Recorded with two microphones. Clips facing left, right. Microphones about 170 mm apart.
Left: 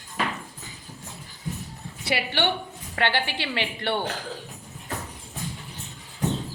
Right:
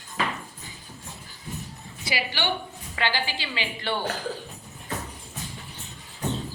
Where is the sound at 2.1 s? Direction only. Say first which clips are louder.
Left 3 dB; 60° left (ahead or behind).